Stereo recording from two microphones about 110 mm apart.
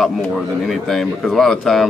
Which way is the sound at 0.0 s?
Centre (ahead or behind).